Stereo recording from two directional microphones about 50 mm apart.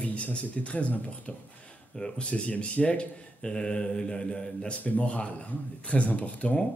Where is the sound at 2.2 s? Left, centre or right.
Left.